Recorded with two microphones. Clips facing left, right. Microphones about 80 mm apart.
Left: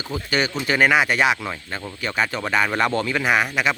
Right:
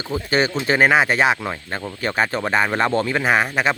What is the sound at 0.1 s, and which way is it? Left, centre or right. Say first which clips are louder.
A man's voice: right 4 dB; right.